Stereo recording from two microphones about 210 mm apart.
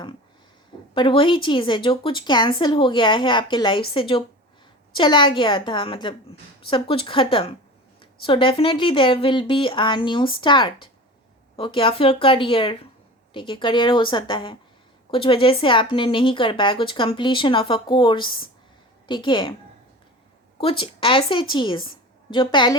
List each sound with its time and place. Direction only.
0.9 s speech: 25° left (ahead or behind)
20.6 s speech: 25° left (ahead or behind)